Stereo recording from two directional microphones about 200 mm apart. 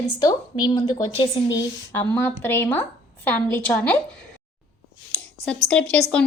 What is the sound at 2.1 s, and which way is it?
A woman's voice, 10° left (ahead or behind).